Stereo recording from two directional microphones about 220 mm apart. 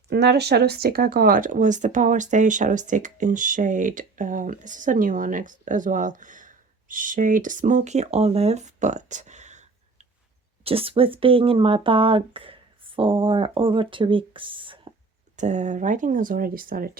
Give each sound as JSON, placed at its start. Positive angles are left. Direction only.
{"t": 0.1, "sound": "speech", "side_deg": -50}